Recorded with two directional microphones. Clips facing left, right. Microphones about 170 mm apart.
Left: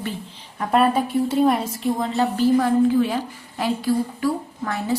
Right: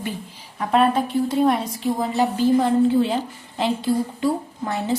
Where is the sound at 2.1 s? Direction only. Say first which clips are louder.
Even; 20° right (ahead or behind).